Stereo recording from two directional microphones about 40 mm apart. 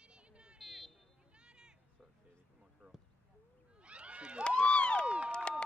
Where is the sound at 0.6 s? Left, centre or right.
Centre.